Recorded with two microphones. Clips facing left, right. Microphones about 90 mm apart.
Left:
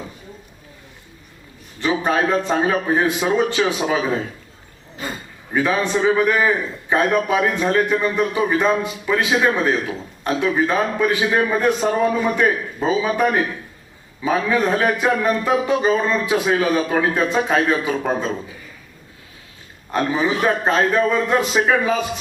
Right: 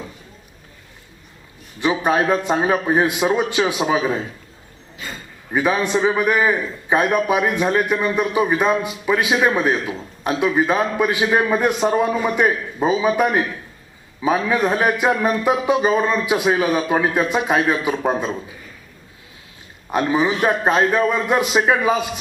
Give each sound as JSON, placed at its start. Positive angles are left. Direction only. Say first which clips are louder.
{"t": 2.0, "sound": "a man's voice", "louder": "even", "side_deg": -15}
{"t": 5.5, "sound": "a man's voice", "louder": "right 1 dB", "side_deg": -15}
{"t": 14.4, "sound": "a man's voice", "louder": "left 2 dB", "side_deg": -10}
{"t": 19.9, "sound": "a man's voice", "louder": "right 1 dB", "side_deg": -15}